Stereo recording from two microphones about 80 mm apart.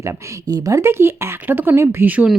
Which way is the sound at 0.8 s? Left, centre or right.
Right.